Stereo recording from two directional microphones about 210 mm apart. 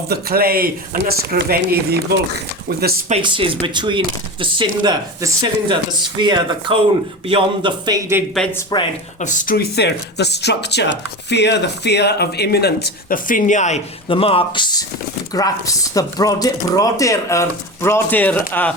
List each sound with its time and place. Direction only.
0.1 s speech: 45° right (ahead or behind)
3.1 s speech: 25° right (ahead or behind)
8.7 s speech: 20° left (ahead or behind)
9.2 s speech: 35° left (ahead or behind); by 18.7 s 5° left (ahead or behind)